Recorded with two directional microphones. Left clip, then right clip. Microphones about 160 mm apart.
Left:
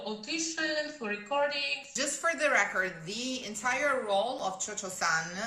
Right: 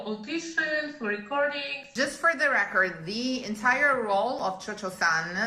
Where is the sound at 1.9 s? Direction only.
20° left (ahead or behind).